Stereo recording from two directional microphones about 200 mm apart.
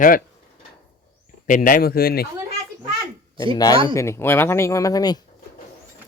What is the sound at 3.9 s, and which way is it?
Speech, 15° left (ahead or behind).